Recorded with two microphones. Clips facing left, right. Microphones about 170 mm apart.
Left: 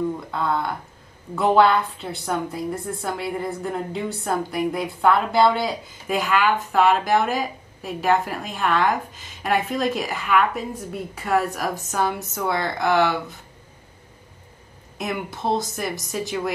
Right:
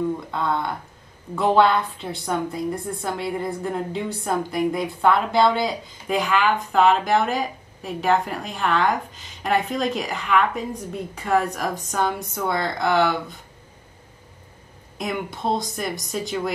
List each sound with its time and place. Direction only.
0.3 s a woman's voice: 5° left (ahead or behind)
15.0 s a woman's voice: 5° left (ahead or behind)